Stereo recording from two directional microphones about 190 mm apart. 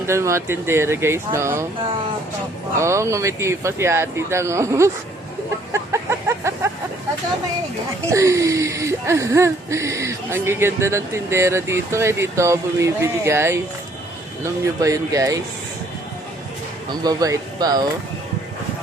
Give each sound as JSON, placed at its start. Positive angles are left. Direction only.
{"t": 0.0, "sound": "speech", "side_deg": -15}
{"t": 2.7, "sound": "speech", "side_deg": -15}
{"t": 5.7, "sound": "a sound", "side_deg": -15}
{"t": 8.1, "sound": "speech", "side_deg": -15}
{"t": 16.9, "sound": "speech", "side_deg": -20}